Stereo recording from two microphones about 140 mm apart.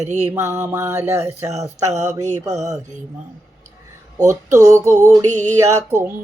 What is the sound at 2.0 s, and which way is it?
Mantra, 60° right (ahead or behind).